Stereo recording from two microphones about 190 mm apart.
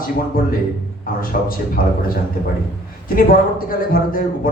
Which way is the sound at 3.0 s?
50° left (ahead or behind).